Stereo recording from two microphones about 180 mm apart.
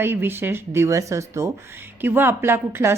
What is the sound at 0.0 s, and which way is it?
Speech, 10° right (ahead or behind).